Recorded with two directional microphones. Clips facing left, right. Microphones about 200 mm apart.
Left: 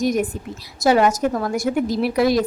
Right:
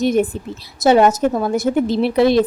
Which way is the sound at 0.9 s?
25° right (ahead or behind).